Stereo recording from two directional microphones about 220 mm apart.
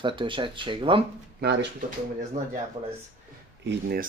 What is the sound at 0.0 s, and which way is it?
Speech, 20° right (ahead or behind).